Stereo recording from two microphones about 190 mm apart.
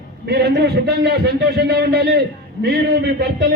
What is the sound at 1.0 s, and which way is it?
A man's voice, 55° right (ahead or behind).